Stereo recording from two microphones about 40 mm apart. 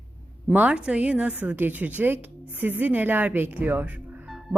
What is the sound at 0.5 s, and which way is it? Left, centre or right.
A woman's voice, right.